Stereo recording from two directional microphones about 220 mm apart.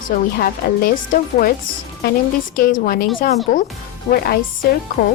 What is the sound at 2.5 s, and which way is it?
A woman's voice, 40° left (ahead or behind).